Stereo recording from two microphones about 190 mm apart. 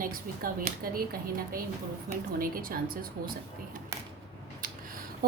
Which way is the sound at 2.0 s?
50° right (ahead or behind).